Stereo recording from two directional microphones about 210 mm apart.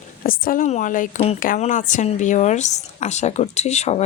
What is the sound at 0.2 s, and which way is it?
A woman's voice, 40° left (ahead or behind).